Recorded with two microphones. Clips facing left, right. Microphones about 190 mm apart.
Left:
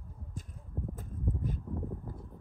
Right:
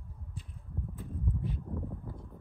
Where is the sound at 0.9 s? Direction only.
45° left (ahead or behind).